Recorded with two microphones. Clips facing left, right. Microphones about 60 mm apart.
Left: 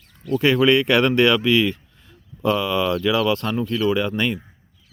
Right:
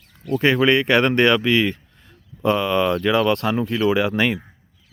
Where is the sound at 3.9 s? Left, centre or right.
Right.